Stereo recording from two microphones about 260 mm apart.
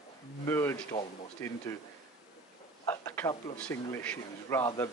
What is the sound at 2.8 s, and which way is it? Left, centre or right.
Speech, centre.